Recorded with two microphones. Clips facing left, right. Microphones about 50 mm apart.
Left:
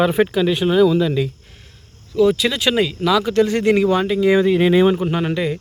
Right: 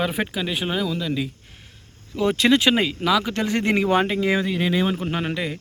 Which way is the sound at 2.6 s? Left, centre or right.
Centre.